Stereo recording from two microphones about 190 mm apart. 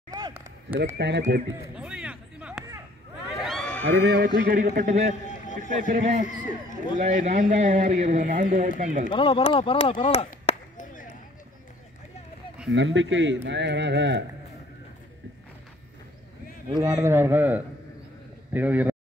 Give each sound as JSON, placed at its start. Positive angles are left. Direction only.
{"t": 0.1, "sound": "a sound", "side_deg": -15}
{"t": 0.9, "sound": "speech", "side_deg": -65}
{"t": 1.8, "sound": "a sound", "side_deg": -5}
{"t": 3.3, "sound": "crowd", "side_deg": 0}
{"t": 3.8, "sound": "speech", "side_deg": -70}
{"t": 4.5, "sound": "a man's voice", "side_deg": -45}
{"t": 6.2, "sound": "speech", "side_deg": 40}
{"t": 7.1, "sound": "speech", "side_deg": -45}
{"t": 9.1, "sound": "speech", "side_deg": 25}
{"t": 12.7, "sound": "speech", "side_deg": -85}
{"t": 16.6, "sound": "speech", "side_deg": -20}